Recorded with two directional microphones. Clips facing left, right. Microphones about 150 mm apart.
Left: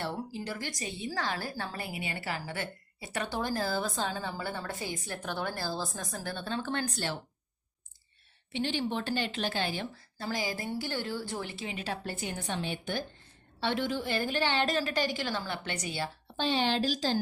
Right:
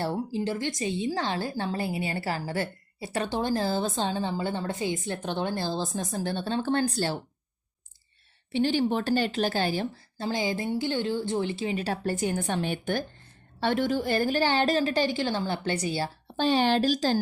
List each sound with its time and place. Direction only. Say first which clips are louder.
0.0 s a woman's voice: right 7 dB; 30° right (ahead or behind)
8.5 s a woman's voice: right 7 dB; 40° right (ahead or behind)
10.2 s a woman's voice: right 6 dB; 25° right (ahead or behind); by 17.2 s 50° right (ahead or behind)